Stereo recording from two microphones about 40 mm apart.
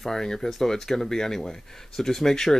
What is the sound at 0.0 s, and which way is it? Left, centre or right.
Speech, centre.